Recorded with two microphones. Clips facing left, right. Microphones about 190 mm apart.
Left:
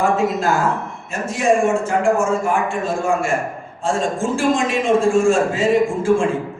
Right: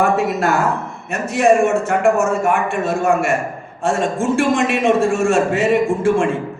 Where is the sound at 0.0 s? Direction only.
65° right (ahead or behind).